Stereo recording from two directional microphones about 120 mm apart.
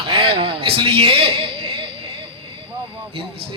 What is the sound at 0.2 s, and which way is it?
A man's voice, 50° right (ahead or behind).